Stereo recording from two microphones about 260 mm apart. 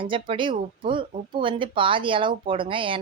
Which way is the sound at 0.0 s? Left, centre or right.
Centre.